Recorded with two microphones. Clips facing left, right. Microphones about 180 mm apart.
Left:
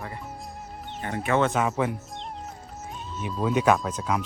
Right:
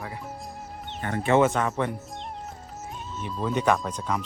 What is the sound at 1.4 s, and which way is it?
Speech, 5° left (ahead or behind).